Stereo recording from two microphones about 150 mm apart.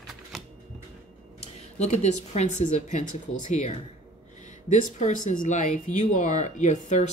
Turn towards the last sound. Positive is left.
turn(degrees=55)  # may be behind; listen again after turning